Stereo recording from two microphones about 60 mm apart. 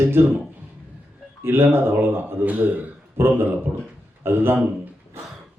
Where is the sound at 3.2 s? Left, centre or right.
Right.